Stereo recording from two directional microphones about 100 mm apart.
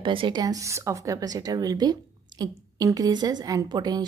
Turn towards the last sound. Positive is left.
turn(degrees=-45)  # may be behind; listen again after turning